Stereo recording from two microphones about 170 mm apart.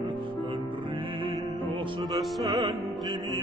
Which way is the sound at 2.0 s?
Centre (ahead or behind).